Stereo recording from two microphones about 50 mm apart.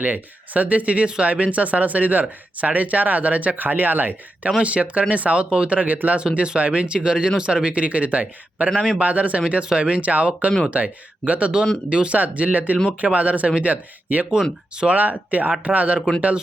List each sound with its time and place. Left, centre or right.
0.0 s speech: right
6.1 s speech: right
16.0 s speech: centre